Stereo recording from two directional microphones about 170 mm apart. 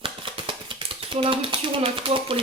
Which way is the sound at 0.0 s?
30° right (ahead or behind).